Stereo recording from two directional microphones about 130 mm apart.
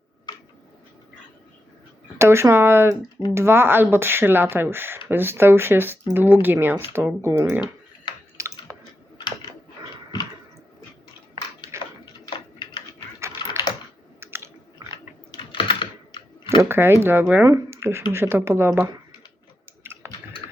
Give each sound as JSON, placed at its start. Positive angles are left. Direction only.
{"t": 2.1, "sound": "speech", "side_deg": -20}
{"t": 8.4, "sound": "typing", "side_deg": -20}
{"t": 9.1, "sound": "a sound", "side_deg": 35}
{"t": 11.7, "sound": "a sound", "side_deg": -20}
{"t": 12.2, "sound": "a sound", "side_deg": 35}
{"t": 13.1, "sound": "typing", "side_deg": -20}
{"t": 14.2, "sound": "chewing", "side_deg": -20}
{"t": 15.3, "sound": "typing", "side_deg": 40}
{"t": 16.6, "sound": "speech", "side_deg": -20}
{"t": 19.8, "sound": "computer keyboard", "side_deg": -20}